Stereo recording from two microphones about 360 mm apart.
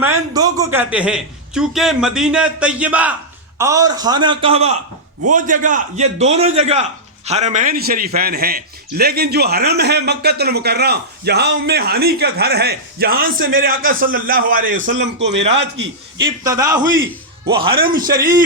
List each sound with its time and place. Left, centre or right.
0.0 s a man's voice: centre; by 16.2 s right
16.2 s a man's voice: centre
17.4 s a man's voice: right